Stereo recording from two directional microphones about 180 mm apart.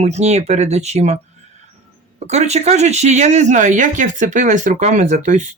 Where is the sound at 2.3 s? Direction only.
40° right (ahead or behind).